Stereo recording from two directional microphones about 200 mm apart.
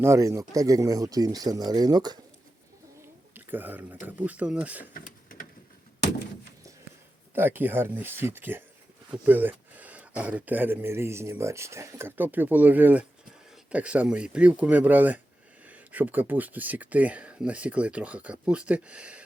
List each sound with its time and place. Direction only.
0.0 s speech: 15° right (ahead or behind)
3.3 s speech: 10° right (ahead or behind)
4.9 s printer: 45° left (ahead or behind)
7.3 s speech: 10° right (ahead or behind)